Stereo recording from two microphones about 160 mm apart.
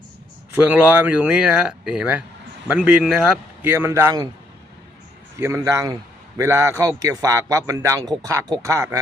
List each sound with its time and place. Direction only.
0.5 s speech: 10° right (ahead or behind)
5.4 s a man's voice: 15° right (ahead or behind)